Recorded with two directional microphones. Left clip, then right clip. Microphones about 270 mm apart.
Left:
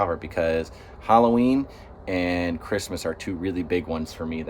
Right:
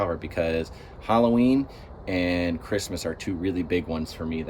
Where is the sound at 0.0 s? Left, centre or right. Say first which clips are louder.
Left 2 dB; centre.